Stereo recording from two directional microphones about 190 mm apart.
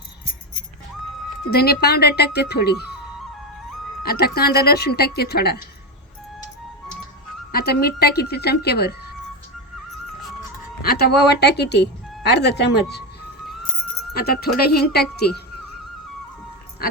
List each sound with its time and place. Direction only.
1.5 s speech: 55° left (ahead or behind)
4.0 s speech: 55° left (ahead or behind)
7.5 s speech: 55° left (ahead or behind)
10.8 s speech: 55° left (ahead or behind)
14.1 s speech: 55° left (ahead or behind)